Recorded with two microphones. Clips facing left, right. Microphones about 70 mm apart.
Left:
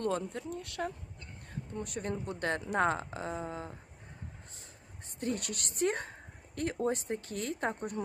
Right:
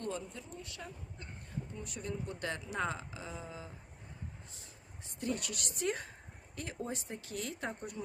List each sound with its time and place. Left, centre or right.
0.0 s speech: left
5.2 s speech: left